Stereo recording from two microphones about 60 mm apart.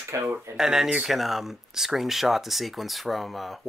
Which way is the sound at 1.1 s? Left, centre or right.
Centre.